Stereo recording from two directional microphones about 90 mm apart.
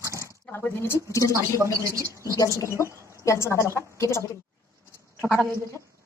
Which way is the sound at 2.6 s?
35° left (ahead or behind).